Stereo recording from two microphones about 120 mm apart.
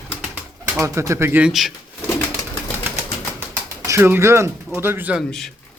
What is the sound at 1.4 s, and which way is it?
Speech, centre (ahead or behind).